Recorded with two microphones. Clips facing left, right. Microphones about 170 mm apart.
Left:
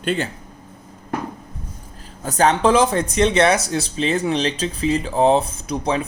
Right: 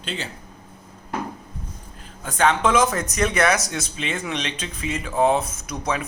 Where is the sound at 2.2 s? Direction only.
35° left (ahead or behind).